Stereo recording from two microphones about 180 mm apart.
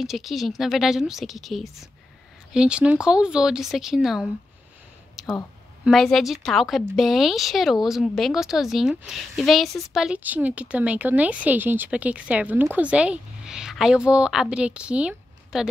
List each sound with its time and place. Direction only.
0.0 s speech: centre (ahead or behind)
5.2 s a sound: centre (ahead or behind)
5.9 s speech: centre (ahead or behind)